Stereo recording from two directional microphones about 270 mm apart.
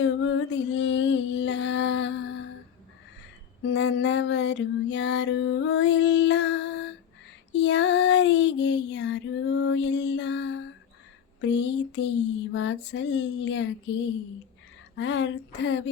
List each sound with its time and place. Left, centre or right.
0.0 s music: left
3.6 s music: left
7.6 s child singing: left
11.3 s music: left
14.9 s child singing: left